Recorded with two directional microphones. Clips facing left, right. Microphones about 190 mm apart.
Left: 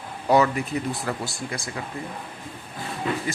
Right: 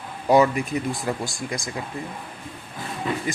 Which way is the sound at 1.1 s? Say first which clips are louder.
Right 2 dB; 15° right (ahead or behind).